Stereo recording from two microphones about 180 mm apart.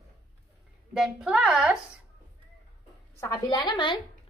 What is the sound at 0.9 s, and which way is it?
Speech, 5° right (ahead or behind).